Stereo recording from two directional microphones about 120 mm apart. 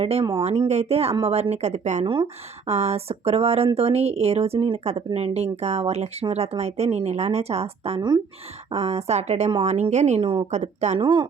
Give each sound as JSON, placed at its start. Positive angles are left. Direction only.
{"t": 0.0, "sound": "a woman's voice", "side_deg": -60}
{"t": 2.2, "sound": "a woman's voice", "side_deg": -60}
{"t": 10.2, "sound": "speech", "side_deg": -45}
{"t": 10.5, "sound": "a woman's voice", "side_deg": -70}
{"t": 11.0, "sound": "speech", "side_deg": -40}